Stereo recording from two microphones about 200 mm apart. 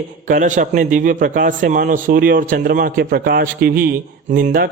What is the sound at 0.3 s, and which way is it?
A man's voice, 40° right (ahead or behind).